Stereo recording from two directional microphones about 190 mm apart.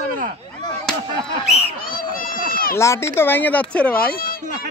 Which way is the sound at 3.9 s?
50° left (ahead or behind).